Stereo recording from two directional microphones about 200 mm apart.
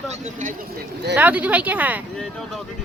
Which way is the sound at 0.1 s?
40° right (ahead or behind).